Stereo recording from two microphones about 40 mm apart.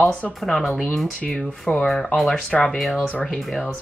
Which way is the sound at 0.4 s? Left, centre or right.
Centre.